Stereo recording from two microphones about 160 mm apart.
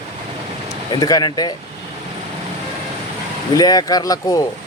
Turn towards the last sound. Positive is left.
turn(degrees=20)  # may be behind; listen again after turning